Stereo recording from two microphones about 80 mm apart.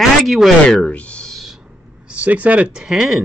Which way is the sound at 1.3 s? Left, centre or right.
Centre.